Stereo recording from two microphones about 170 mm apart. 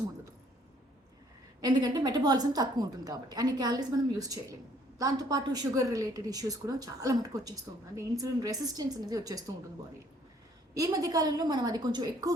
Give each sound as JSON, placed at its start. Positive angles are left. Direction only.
{"t": 1.6, "sound": "a woman's voice", "side_deg": -25}
{"t": 10.8, "sound": "a woman's voice", "side_deg": -20}